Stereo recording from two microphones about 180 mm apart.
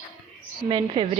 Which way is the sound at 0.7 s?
30° right (ahead or behind).